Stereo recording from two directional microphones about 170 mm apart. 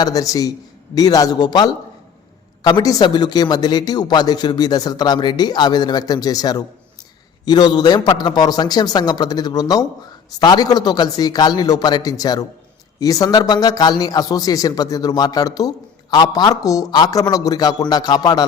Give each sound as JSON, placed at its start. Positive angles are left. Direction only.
{"t": 0.0, "sound": "a man's voice", "side_deg": 20}